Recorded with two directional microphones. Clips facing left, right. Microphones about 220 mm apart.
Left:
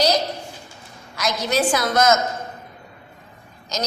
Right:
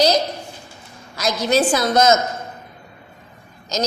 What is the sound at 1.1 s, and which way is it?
A woman's voice, 30° right (ahead or behind).